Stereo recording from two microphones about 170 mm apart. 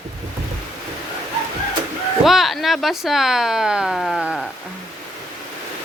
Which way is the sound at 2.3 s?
Centre (ahead or behind).